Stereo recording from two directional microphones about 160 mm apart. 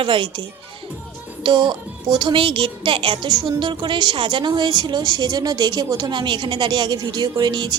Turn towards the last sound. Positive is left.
turn(degrees=-30)  # may be behind; listen again after turning